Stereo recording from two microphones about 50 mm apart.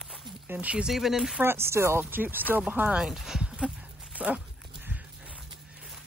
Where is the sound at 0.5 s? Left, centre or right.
Right.